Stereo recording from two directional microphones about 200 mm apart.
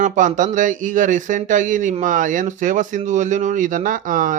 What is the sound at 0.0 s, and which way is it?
Speech, 40° right (ahead or behind).